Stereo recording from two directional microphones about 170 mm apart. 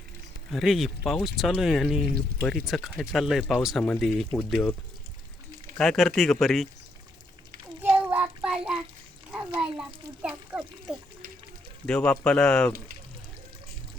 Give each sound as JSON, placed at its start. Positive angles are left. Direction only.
{"t": 0.5, "sound": "speech", "side_deg": 0}
{"t": 5.7, "sound": "speech", "side_deg": 5}
{"t": 7.8, "sound": "child singing", "side_deg": -10}
{"t": 9.3, "sound": "speech", "side_deg": -5}